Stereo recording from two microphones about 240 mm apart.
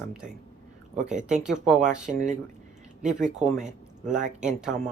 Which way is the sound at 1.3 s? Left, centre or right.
Centre.